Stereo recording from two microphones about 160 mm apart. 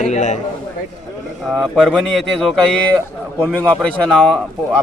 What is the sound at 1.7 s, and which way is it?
Speech, centre (ahead or behind).